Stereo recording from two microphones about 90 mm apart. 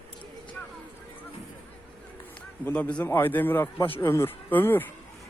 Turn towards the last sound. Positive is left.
turn(degrees=20)  # may be behind; listen again after turning